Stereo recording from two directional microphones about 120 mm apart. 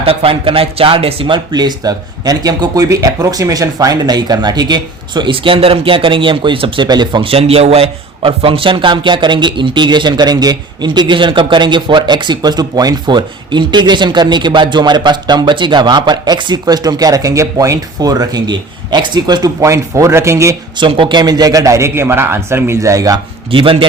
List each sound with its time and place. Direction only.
0.0 s speech: 50° right (ahead or behind)
1.5 s a man's voice: 35° right (ahead or behind)
20.7 s a man's voice: 45° right (ahead or behind); by 23.2 s 30° right (ahead or behind)
23.5 s speech: 45° right (ahead or behind)